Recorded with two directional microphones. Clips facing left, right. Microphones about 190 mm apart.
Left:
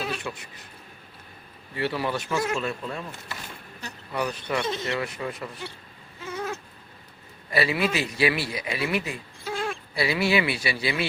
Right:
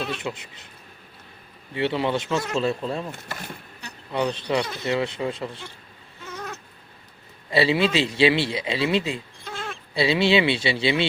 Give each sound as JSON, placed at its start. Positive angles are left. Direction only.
{"t": 0.2, "sound": "speech", "side_deg": -20}
{"t": 1.7, "sound": "speech", "side_deg": -20}
{"t": 4.1, "sound": "speech", "side_deg": -25}
{"t": 6.2, "sound": "cat", "side_deg": 10}
{"t": 7.5, "sound": "speech", "side_deg": -25}
{"t": 9.4, "sound": "a sound", "side_deg": 5}
{"t": 9.9, "sound": "speech", "side_deg": -25}